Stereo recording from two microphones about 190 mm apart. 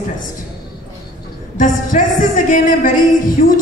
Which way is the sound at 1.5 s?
45° left (ahead or behind).